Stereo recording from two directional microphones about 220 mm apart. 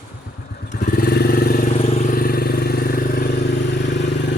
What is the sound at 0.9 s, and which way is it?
Vehicle, 45° left (ahead or behind).